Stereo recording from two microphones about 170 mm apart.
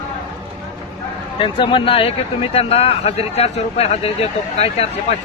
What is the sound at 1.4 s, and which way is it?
Speech, 30° left (ahead or behind).